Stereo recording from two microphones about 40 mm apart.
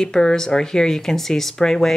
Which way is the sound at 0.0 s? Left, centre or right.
Centre.